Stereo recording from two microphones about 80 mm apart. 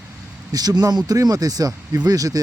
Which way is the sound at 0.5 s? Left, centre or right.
Right.